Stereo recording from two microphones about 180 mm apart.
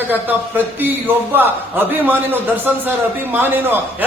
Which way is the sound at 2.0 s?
10° right (ahead or behind).